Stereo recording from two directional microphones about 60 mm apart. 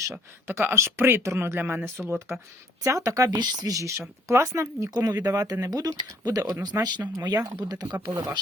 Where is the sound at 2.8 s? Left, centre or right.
Right.